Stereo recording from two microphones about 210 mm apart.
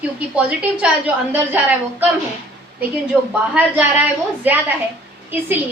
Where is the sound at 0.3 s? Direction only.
5° right (ahead or behind).